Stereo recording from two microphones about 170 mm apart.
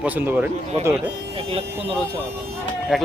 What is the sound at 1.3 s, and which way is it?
Speech, 35° right (ahead or behind).